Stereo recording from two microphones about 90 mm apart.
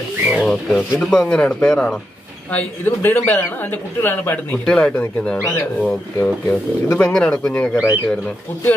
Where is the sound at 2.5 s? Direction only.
25° left (ahead or behind).